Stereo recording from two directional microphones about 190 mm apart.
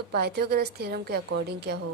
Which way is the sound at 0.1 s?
55° right (ahead or behind).